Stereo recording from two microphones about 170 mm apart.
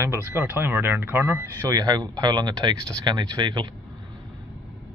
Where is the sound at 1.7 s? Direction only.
25° right (ahead or behind).